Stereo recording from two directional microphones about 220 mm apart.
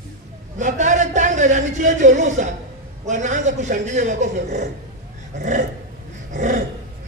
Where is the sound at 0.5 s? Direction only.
35° right (ahead or behind).